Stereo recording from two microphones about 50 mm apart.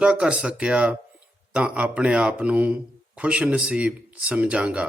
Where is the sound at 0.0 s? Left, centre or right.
Right.